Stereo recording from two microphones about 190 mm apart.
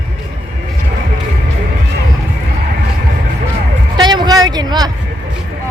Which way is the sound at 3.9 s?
25° right (ahead or behind).